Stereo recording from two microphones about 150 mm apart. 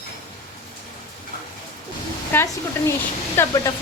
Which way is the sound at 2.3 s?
15° left (ahead or behind).